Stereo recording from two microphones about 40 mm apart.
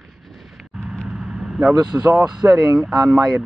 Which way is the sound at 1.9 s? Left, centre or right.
Right.